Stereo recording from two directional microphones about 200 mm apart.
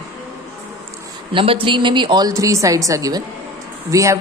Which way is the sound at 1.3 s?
25° right (ahead or behind).